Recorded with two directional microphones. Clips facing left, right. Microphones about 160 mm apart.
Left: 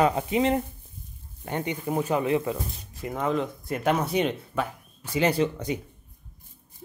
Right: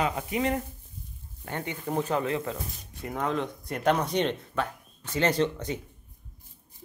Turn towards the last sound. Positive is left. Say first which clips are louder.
# left 2 dB
turn(degrees=10)  # may be behind; listen again after turning